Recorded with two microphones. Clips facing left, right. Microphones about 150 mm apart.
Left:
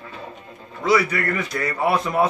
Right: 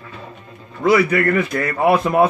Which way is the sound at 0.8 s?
55° right (ahead or behind).